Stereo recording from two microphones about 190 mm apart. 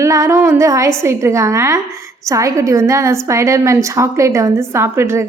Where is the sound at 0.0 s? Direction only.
15° right (ahead or behind).